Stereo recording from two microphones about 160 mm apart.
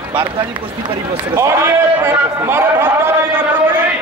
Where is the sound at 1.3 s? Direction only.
15° right (ahead or behind).